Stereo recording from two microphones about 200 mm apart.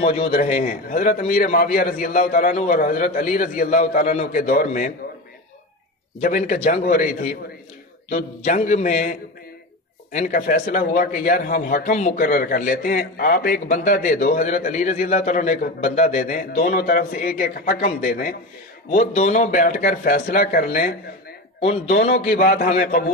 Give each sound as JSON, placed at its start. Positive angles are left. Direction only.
{"t": 0.3, "sound": "a man's voice", "side_deg": 45}
{"t": 6.2, "sound": "a man's voice", "side_deg": 40}
{"t": 21.5, "sound": "a man's voice", "side_deg": 30}
{"t": 21.9, "sound": "a man's voice", "side_deg": 55}